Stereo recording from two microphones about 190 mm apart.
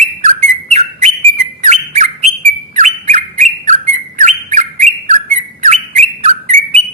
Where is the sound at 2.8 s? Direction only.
40° right (ahead or behind).